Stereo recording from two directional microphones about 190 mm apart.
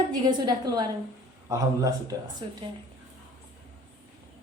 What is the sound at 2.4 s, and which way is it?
Speech, 30° right (ahead or behind).